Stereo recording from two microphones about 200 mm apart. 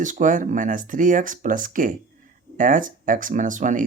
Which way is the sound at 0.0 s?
40° right (ahead or behind).